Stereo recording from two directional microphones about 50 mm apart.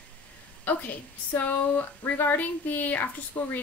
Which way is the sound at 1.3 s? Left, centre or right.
Left.